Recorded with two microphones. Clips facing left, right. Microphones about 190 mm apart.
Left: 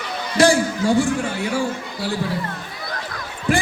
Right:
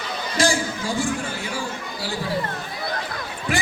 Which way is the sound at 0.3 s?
65° left (ahead or behind).